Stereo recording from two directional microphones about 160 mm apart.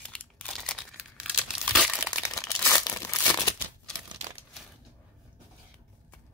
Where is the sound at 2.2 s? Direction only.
20° left (ahead or behind).